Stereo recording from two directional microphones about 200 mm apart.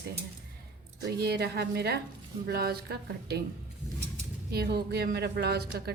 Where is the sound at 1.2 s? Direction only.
55° right (ahead or behind).